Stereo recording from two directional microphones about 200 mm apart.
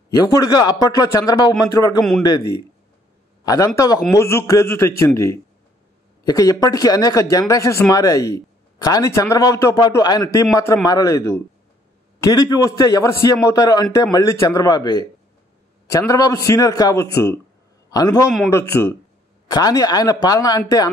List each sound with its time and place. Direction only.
0.3 s a man's voice: 20° left (ahead or behind)
2.0 s a man's voice: centre (ahead or behind)
3.4 s a man's voice: 15° left (ahead or behind)